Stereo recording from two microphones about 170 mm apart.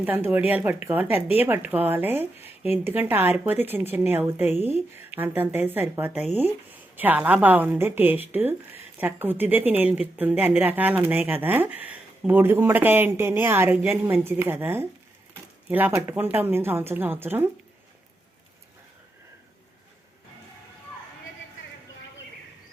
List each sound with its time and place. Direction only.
0.0 s a woman's voice: 10° right (ahead or behind)